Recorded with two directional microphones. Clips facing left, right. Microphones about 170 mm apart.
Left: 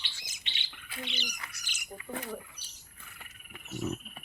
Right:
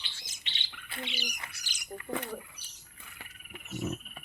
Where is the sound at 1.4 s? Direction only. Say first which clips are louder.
Even; 30° right (ahead or behind).